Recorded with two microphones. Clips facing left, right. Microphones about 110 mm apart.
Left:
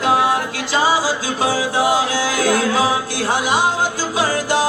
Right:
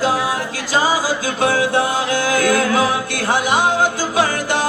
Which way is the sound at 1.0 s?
55° right (ahead or behind).